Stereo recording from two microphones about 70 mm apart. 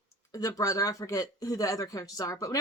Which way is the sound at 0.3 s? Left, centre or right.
Left.